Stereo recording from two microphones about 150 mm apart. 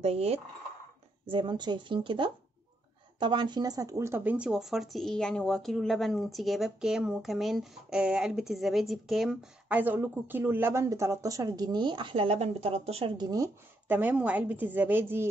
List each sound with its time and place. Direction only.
0.0 s speech: 40° right (ahead or behind)
1.2 s speech: 30° right (ahead or behind)
13.2 s speech: 25° right (ahead or behind)
13.8 s speech: 10° right (ahead or behind)